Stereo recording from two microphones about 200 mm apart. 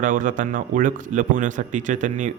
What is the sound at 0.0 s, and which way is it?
A man's voice, 40° right (ahead or behind).